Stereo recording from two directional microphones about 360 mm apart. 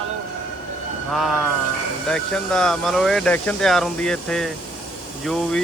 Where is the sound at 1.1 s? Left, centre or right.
Centre.